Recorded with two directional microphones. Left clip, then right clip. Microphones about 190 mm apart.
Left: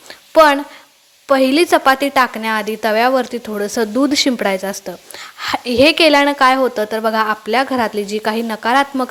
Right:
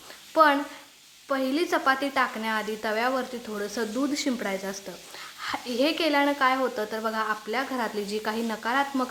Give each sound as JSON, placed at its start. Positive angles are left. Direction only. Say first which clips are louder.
{"t": 0.3, "sound": "a woman's voice", "louder": "left 10 dB", "side_deg": 35}